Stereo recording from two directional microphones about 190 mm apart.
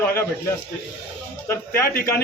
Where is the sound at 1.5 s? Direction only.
15° left (ahead or behind).